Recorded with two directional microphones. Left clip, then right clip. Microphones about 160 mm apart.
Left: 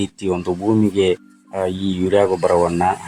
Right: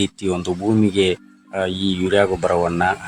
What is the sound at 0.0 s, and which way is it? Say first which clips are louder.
Speech: even; 10° left (ahead or behind).